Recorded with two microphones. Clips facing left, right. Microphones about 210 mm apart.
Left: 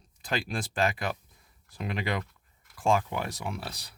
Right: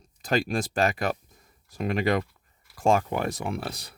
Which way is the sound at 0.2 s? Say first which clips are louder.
Right 7 dB; 45° right (ahead or behind).